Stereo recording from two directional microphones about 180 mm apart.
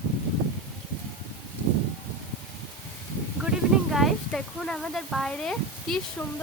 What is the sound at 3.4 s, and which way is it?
Speech, centre (ahead or behind).